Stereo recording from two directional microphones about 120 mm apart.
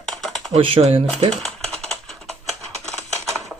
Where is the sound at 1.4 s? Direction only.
5° left (ahead or behind).